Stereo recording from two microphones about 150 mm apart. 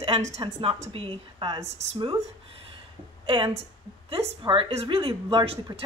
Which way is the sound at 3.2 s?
35° right (ahead or behind).